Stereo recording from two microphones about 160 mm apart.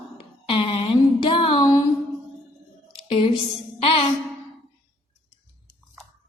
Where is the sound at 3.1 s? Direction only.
35° left (ahead or behind).